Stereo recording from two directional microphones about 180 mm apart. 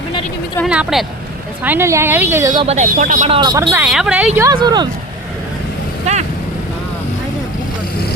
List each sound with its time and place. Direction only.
0.6 s a woman's voice: 5° right (ahead or behind); by 2.6 s 20° right (ahead or behind)
2.6 s speech: 40° right (ahead or behind)
3.2 s speech: 25° right (ahead or behind)
3.7 s a woman's voice: 10° right (ahead or behind)
4.5 s speech: 25° right (ahead or behind)